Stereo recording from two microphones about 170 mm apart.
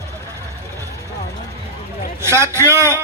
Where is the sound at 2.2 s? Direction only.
15° right (ahead or behind).